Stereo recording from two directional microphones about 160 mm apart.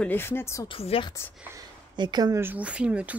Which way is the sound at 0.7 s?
35° left (ahead or behind).